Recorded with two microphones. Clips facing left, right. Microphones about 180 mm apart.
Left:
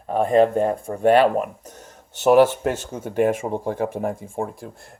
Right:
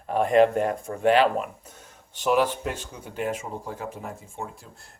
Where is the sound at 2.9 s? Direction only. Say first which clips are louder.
Left 10 dB; 50° left (ahead or behind).